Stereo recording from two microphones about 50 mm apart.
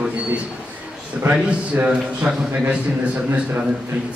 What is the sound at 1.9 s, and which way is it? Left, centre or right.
Speech, right.